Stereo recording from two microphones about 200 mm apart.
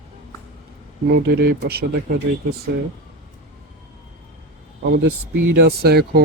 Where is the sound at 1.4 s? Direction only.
50° right (ahead or behind).